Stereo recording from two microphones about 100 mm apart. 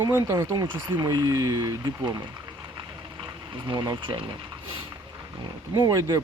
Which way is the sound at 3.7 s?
55° right (ahead or behind).